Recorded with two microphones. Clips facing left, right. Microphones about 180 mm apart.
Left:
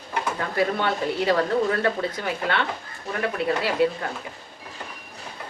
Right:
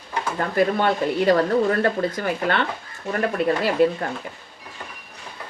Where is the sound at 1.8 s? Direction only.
45° right (ahead or behind).